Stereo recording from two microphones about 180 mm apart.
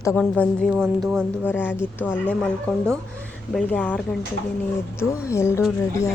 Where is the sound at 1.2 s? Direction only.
10° left (ahead or behind).